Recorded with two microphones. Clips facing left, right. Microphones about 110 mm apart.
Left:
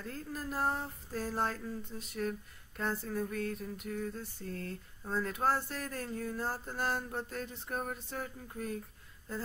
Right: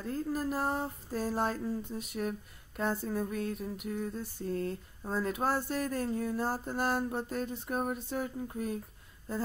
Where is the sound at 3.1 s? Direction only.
20° right (ahead or behind).